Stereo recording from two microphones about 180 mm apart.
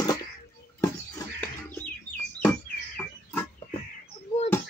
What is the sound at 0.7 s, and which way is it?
Chicken, 15° left (ahead or behind).